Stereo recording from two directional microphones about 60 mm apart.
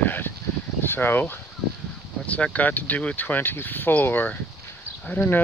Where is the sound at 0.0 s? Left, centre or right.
Left.